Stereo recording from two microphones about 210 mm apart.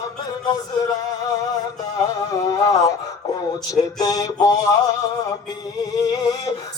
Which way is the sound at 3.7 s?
15° left (ahead or behind).